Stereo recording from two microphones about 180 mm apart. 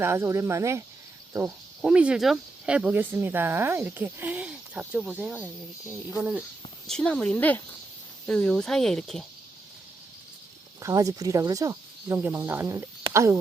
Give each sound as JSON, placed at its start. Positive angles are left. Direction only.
{"t": 0.0, "sound": "speech", "side_deg": -15}
{"t": 6.8, "sound": "speech", "side_deg": 5}
{"t": 10.8, "sound": "speech", "side_deg": -20}